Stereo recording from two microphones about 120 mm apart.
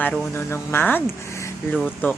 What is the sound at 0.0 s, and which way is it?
Speech, 15° left (ahead or behind).